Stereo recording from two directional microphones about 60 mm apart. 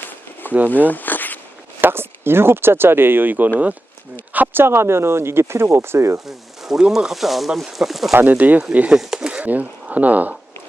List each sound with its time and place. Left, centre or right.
0.7 s zipper: left
1.8 s speech: right
4.3 s a sound: right
4.6 s speech: right
6.2 s speech: centre
8.1 s speech: right
8.9 s speech: centre
9.4 s speech: right